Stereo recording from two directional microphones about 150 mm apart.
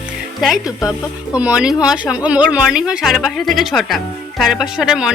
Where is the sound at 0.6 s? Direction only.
25° left (ahead or behind).